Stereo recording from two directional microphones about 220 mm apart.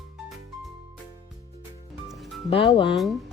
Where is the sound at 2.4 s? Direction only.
25° left (ahead or behind).